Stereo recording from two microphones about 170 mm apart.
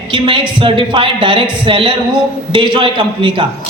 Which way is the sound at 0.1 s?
30° right (ahead or behind).